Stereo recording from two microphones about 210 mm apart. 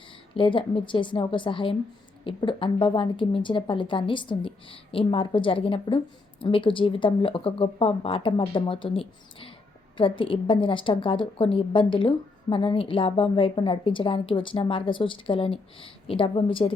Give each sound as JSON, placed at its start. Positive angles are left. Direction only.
{"t": 0.3, "sound": "a woman's voice", "side_deg": 25}